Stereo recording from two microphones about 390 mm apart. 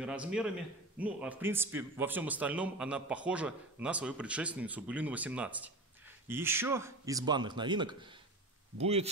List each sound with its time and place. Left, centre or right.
0.0 s a man's voice: centre